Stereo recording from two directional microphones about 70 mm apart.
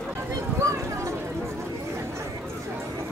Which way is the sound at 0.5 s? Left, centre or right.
Right.